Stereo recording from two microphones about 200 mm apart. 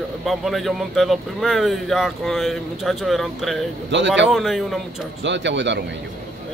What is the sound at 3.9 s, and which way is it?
Speech, 65° right (ahead or behind).